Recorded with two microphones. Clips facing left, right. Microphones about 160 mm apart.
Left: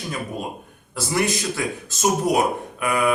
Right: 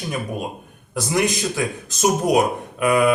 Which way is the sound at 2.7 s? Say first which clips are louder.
Right 9 dB; 20° right (ahead or behind).